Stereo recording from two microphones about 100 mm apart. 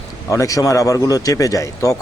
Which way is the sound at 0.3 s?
30° left (ahead or behind).